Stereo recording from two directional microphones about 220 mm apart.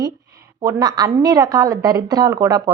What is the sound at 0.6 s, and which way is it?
A woman's voice, 15° right (ahead or behind).